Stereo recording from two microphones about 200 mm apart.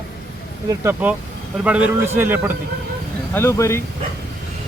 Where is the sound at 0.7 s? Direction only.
15° right (ahead or behind).